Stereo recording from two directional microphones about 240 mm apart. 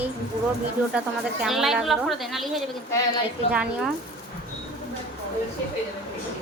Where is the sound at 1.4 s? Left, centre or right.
Centre.